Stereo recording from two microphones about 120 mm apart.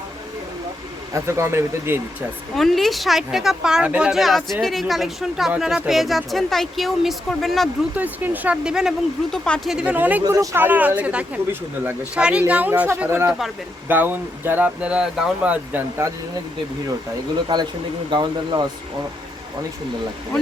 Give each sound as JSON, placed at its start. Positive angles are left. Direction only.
{"t": 1.1, "sound": "speech", "side_deg": -20}
{"t": 2.6, "sound": "speech", "side_deg": 0}
{"t": 7.9, "sound": "speech", "side_deg": -15}
{"t": 9.7, "sound": "speech", "side_deg": -10}
{"t": 10.3, "sound": "speech", "side_deg": -25}
{"t": 10.6, "sound": "speech", "side_deg": -15}
{"t": 15.7, "sound": "speech", "side_deg": -20}
{"t": 17.5, "sound": "speech", "side_deg": -35}